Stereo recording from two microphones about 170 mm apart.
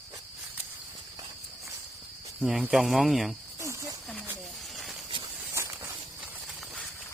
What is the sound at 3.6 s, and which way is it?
Cricket, 15° right (ahead or behind).